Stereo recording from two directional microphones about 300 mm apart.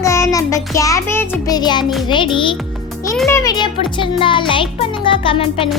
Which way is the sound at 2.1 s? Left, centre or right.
Centre.